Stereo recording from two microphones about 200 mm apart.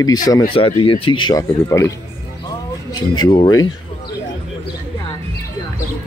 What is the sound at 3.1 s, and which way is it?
Speech, 20° left (ahead or behind).